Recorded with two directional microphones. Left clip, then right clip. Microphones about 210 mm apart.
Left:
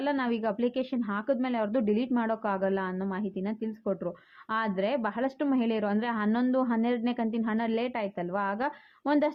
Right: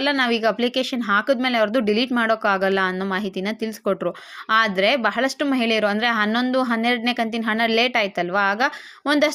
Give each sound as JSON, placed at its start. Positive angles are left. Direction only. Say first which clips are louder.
{"t": 0.0, "sound": "speech", "louder": "right 10 dB", "side_deg": -15}